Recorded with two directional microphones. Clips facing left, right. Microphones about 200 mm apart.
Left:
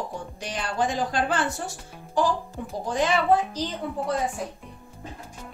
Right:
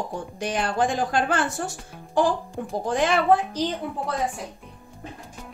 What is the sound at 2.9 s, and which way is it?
Speech, 55° right (ahead or behind).